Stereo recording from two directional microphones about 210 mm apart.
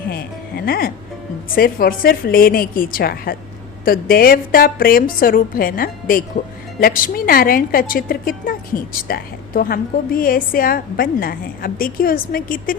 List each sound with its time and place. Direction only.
0.1 s a woman's voice: 45° left (ahead or behind)